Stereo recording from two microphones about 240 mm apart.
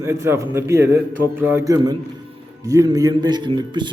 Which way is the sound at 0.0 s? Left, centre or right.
Centre.